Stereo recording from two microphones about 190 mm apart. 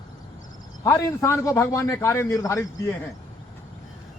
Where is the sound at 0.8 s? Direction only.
15° left (ahead or behind).